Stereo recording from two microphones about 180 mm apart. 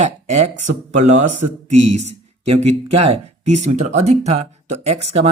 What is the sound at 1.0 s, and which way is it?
Speech, 40° right (ahead or behind).